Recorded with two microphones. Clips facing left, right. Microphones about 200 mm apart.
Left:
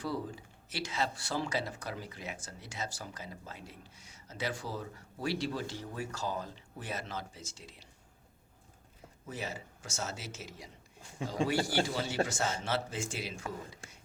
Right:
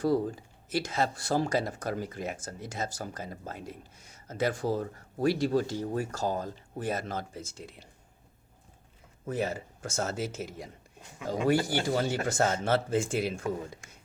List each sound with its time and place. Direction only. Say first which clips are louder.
0.0 s speech: right 10 dB; 45° right (ahead or behind)
9.2 s speech: right 9 dB; 55° right (ahead or behind)